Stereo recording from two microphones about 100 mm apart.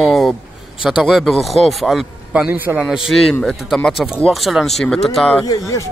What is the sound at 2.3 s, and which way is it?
Speech, 15° right (ahead or behind).